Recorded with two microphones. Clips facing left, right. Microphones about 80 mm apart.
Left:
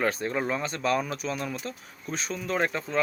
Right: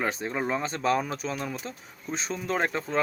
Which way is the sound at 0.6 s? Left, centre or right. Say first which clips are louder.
Right 1 dB; right.